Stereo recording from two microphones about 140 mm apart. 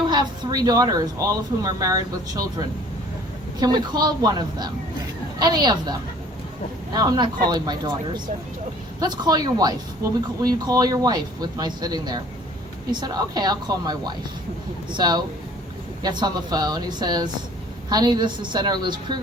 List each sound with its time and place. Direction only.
0.0 s a woman's voice: 30° right (ahead or behind)